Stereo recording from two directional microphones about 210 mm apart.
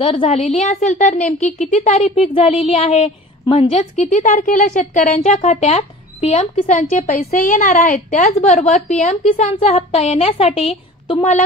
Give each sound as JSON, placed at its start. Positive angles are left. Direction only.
{"t": 0.0, "sound": "a woman's voice", "side_deg": 25}